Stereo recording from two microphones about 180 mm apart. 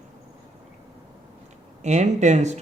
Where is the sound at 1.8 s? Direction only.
40° right (ahead or behind).